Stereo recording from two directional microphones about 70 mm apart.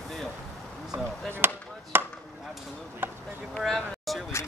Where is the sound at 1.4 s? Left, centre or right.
Right.